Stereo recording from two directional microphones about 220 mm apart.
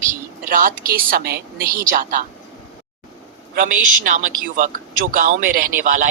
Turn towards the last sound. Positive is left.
turn(degrees=-35)  # may be behind; listen again after turning